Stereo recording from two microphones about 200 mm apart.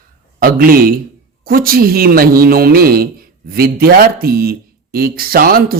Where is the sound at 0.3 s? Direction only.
45° right (ahead or behind).